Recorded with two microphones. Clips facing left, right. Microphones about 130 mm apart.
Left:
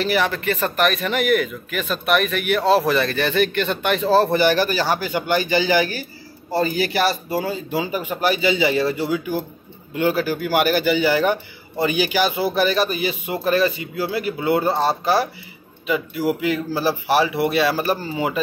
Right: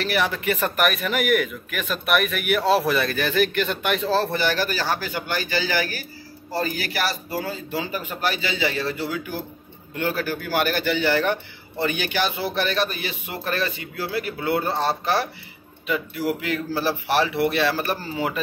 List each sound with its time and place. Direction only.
0.0 s a man's voice: centre (ahead or behind)
4.1 s a man's voice: 15° left (ahead or behind)